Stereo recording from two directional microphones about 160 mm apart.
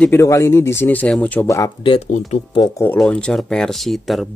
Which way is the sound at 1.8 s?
35° left (ahead or behind).